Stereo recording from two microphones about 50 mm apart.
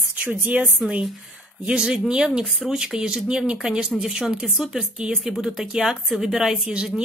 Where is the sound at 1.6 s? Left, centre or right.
Centre.